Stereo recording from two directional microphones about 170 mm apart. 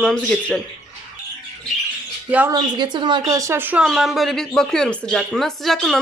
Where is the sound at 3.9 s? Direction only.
Centre (ahead or behind).